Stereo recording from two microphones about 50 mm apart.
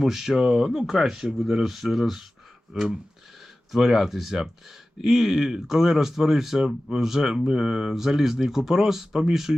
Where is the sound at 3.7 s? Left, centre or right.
Centre.